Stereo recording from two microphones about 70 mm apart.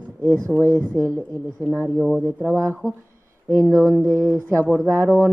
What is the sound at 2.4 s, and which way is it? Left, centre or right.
A woman's voice, right.